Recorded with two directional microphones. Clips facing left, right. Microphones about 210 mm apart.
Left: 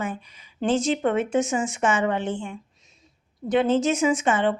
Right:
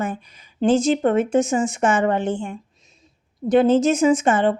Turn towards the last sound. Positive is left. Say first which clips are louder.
# right 5 dB
turn(degrees=-45)  # may be behind; listen again after turning